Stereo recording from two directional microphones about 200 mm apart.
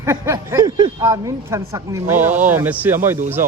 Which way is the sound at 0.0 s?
15° right (ahead or behind).